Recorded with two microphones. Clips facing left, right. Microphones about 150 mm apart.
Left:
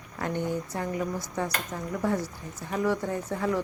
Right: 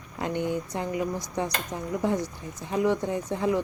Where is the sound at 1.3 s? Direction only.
20° right (ahead or behind).